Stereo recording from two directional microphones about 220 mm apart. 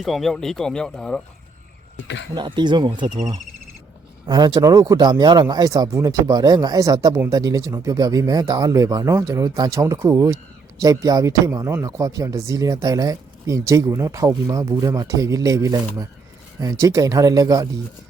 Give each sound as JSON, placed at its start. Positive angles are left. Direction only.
{"t": 0.0, "sound": "speech", "side_deg": 0}
{"t": 2.3, "sound": "speech", "side_deg": -20}